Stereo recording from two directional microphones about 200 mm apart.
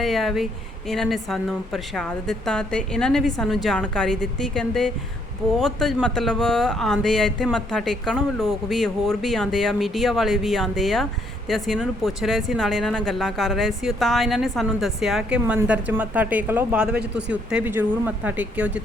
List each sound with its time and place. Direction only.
0.0 s speech: centre (ahead or behind)
17.0 s speech: 60° right (ahead or behind)
17.3 s speech: 10° right (ahead or behind)